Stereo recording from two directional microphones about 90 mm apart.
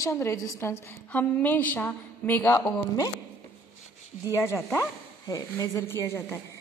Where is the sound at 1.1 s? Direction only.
15° left (ahead or behind).